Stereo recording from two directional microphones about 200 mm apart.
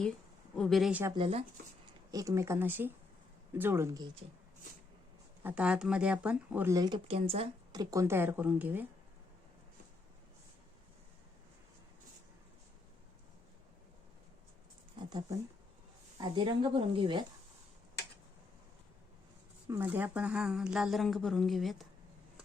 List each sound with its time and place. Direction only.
0.5 s a woman's voice: centre (ahead or behind)
1.1 s speech: 30° right (ahead or behind)
2.0 s speech: 15° right (ahead or behind)
5.4 s speech: 10° right (ahead or behind)
14.9 s a sound: 20° right (ahead or behind)
16.2 s speech: 25° right (ahead or behind)
19.6 s a woman's voice: 10° right (ahead or behind)